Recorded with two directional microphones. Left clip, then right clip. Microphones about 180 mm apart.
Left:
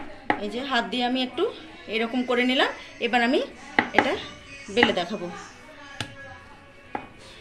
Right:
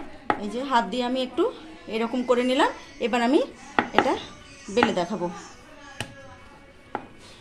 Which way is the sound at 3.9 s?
55° right (ahead or behind).